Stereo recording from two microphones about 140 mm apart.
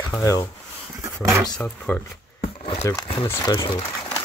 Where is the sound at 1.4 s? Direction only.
10° left (ahead or behind).